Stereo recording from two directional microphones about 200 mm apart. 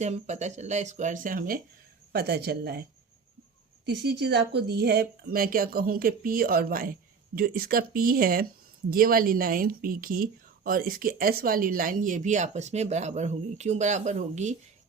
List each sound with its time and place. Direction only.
0.0 s speech: 35° right (ahead or behind); by 2.8 s 50° right (ahead or behind)
3.8 s speech: 60° right (ahead or behind); by 14.5 s 35° right (ahead or behind)